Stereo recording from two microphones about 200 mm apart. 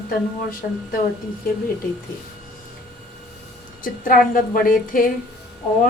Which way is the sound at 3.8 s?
45° left (ahead or behind).